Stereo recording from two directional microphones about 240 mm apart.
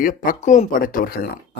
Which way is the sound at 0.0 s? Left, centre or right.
Left.